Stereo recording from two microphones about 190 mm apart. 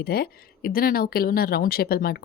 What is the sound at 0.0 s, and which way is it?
A woman's voice, 55° left (ahead or behind).